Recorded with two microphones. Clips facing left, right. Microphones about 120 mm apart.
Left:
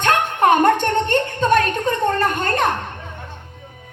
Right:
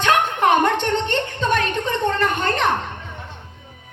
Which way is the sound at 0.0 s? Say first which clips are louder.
Left 1 dB; 50° left (ahead or behind).